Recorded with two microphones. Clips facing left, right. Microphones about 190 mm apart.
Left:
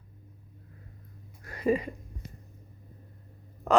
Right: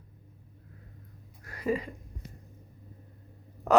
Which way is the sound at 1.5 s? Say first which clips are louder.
Left 4 dB; 25° left (ahead or behind).